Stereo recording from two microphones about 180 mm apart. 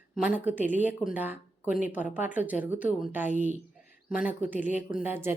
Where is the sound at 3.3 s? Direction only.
45° right (ahead or behind).